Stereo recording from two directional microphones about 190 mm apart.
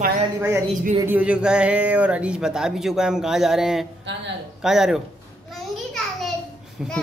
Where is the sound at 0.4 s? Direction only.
10° right (ahead or behind).